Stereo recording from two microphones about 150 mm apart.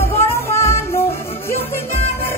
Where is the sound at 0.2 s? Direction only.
20° left (ahead or behind).